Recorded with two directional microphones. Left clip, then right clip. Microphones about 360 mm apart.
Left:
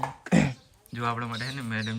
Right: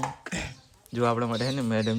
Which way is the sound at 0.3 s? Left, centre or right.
Centre.